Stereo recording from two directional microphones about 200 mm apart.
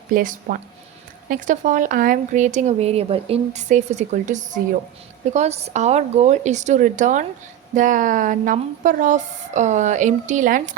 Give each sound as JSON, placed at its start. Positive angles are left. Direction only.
{"t": 0.1, "sound": "speech", "side_deg": -40}